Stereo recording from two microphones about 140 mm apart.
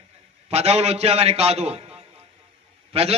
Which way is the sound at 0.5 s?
50° right (ahead or behind).